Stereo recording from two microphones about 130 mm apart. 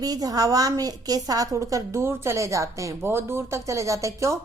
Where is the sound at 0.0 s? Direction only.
30° right (ahead or behind).